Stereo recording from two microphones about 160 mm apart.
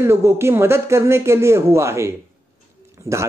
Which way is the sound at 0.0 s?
15° right (ahead or behind).